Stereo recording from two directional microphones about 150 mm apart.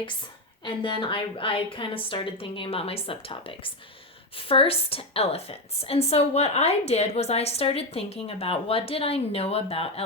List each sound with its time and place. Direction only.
0.6 s a woman's voice: 35° left (ahead or behind)